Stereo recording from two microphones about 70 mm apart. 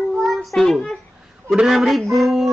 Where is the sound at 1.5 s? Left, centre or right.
Centre.